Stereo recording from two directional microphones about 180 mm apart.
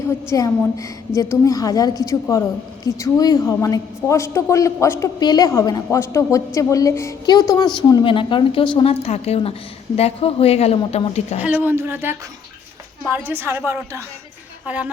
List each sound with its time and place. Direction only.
0.3 s a woman's voice: 20° left (ahead or behind); by 11.3 s 35° left (ahead or behind)
11.3 s a woman's voice: 10° right (ahead or behind)